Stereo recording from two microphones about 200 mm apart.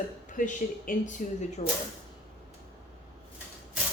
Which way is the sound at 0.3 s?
40° left (ahead or behind).